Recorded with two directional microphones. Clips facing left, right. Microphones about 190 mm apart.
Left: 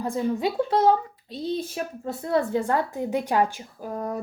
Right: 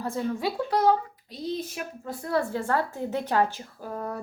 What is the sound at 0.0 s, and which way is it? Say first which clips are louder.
Speech: left 3 dB; 20° left (ahead or behind).